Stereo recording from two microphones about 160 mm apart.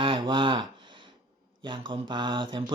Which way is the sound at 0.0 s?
30° right (ahead or behind).